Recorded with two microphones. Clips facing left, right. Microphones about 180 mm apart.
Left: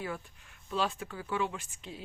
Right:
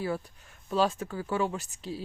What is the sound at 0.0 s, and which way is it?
Speech, 40° right (ahead or behind).